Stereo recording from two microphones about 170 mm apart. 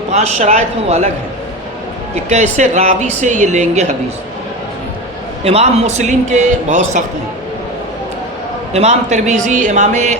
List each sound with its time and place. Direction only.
0.1 s a man's voice: 40° right (ahead or behind)
2.1 s speech: 40° right (ahead or behind)
5.4 s speech: 35° right (ahead or behind)
8.7 s speech: 40° right (ahead or behind)